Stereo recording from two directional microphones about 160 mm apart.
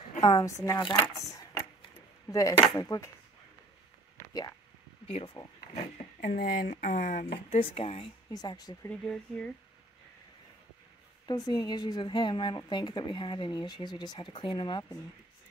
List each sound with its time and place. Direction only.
0.2 s a woman's voice: 20° left (ahead or behind)
4.3 s a sound: 25° left (ahead or behind)
5.0 s speech: 35° left (ahead or behind)
6.2 s speech: 65° left (ahead or behind)
7.2 s speech: 40° left (ahead or behind)
8.3 s a woman's voice: 25° left (ahead or behind)
8.8 s speech: 5° left (ahead or behind)
11.2 s a woman's voice: 25° left (ahead or behind)